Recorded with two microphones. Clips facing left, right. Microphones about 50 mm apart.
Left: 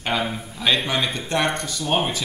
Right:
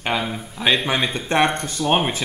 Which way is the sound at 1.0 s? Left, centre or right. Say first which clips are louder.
Right 4 dB; right.